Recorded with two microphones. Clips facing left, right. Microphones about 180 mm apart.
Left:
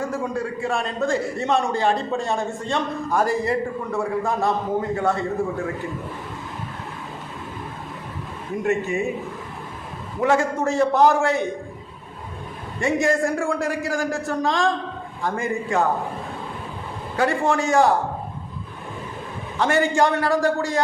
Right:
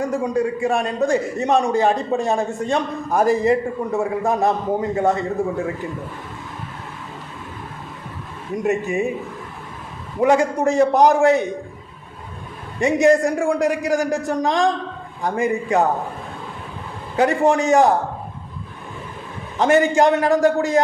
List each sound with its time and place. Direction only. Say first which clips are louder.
0.0 s a man's voice: right 5 dB; 15° right (ahead or behind)
8.6 s a man's voice: right 2 dB; 15° right (ahead or behind)
10.2 s a man's voice: right 4 dB; 15° right (ahead or behind)
12.8 s a man's voice: right 5 dB; 20° right (ahead or behind)
17.2 s a man's voice: right 4 dB; 15° right (ahead or behind)
19.5 s a man's voice: right 4 dB; 20° right (ahead or behind)